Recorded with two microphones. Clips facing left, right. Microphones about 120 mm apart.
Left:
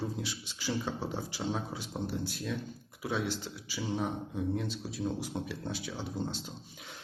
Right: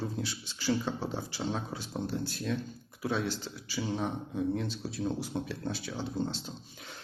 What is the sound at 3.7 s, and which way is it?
A man's voice, 5° left (ahead or behind).